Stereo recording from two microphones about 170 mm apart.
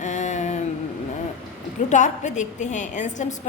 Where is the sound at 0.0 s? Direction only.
45° left (ahead or behind).